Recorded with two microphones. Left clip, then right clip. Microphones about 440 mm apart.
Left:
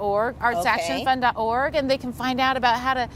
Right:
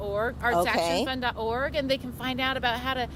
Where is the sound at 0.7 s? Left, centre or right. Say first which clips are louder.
Even; right.